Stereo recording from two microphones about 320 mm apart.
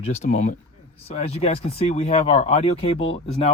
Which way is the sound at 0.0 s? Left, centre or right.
Centre.